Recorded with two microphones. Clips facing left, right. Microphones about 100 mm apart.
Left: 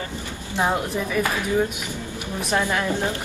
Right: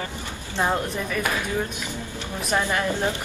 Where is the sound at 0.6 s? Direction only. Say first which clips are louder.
Left 1 dB; 10° left (ahead or behind).